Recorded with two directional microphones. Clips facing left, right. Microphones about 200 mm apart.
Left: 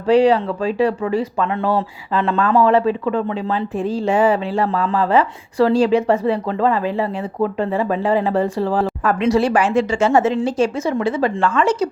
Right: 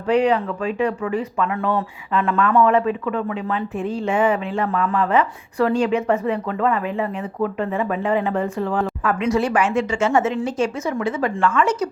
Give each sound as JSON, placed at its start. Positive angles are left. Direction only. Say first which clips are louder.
{"t": 0.1, "sound": "speech", "louder": "left 4 dB", "side_deg": 30}